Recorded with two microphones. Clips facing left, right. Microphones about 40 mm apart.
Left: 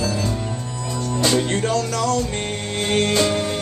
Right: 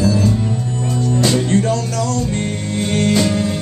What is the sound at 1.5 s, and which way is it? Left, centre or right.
Music, left.